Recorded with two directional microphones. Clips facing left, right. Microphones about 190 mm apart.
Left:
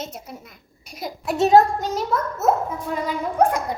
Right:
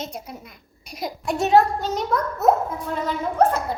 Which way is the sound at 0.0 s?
5° left (ahead or behind).